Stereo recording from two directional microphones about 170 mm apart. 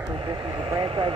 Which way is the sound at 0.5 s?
30° right (ahead or behind).